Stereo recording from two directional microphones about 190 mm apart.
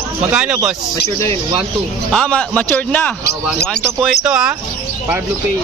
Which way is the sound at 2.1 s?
5° left (ahead or behind).